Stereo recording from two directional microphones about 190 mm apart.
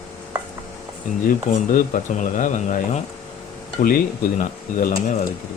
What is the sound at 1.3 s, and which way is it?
Speech, 45° left (ahead or behind).